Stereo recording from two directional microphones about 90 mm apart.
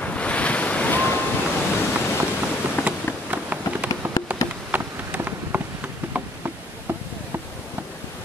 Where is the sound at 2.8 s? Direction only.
25° left (ahead or behind).